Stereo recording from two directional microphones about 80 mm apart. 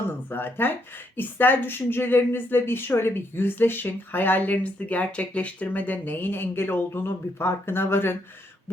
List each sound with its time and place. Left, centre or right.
0.0 s speech: left